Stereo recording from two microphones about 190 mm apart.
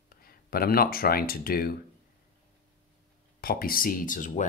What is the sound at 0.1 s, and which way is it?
Speech, 50° left (ahead or behind).